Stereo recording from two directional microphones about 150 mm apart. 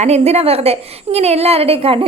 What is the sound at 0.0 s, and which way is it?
A woman's voice, 45° right (ahead or behind).